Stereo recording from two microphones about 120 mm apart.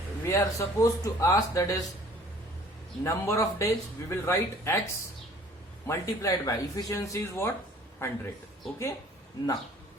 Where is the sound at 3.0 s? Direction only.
25° left (ahead or behind).